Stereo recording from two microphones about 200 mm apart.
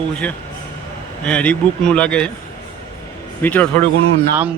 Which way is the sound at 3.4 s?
10° left (ahead or behind).